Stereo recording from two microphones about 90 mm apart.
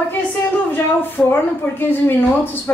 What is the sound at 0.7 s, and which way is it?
Speech, 25° left (ahead or behind).